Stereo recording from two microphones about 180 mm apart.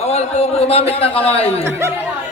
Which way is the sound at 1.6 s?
15° right (ahead or behind).